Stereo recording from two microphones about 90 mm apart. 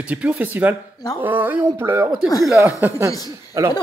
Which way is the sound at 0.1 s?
15° right (ahead or behind).